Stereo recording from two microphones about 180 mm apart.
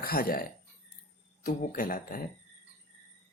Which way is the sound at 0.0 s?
55° left (ahead or behind).